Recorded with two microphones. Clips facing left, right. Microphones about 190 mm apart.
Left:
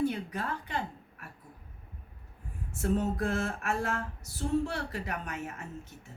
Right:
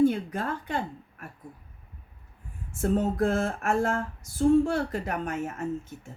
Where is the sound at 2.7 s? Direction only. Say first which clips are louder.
Right 4 dB; 50° right (ahead or behind).